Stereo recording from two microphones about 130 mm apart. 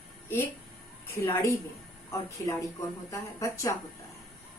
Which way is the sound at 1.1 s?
20° left (ahead or behind).